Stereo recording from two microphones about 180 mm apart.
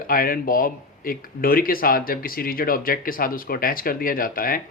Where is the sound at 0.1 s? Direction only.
50° left (ahead or behind).